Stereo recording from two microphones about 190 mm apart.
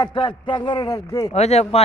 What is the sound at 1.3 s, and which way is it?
Speech, 35° left (ahead or behind).